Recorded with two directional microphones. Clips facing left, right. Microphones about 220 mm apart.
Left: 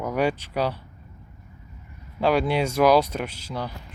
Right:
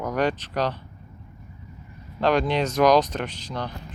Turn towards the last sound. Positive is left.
turn(degrees=5)  # may be behind; listen again after turning